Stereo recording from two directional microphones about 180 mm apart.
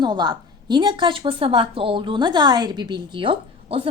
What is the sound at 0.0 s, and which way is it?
A woman's voice, 25° right (ahead or behind).